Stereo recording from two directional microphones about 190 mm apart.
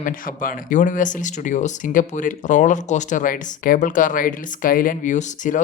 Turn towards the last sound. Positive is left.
turn(degrees=40)  # may be behind; listen again after turning